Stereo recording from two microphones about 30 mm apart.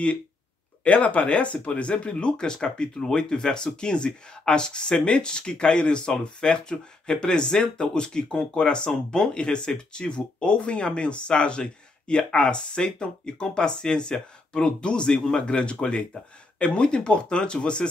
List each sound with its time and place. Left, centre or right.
0.8 s speech: left